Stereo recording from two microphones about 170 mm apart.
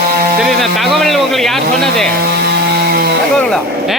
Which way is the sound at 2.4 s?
65° right (ahead or behind).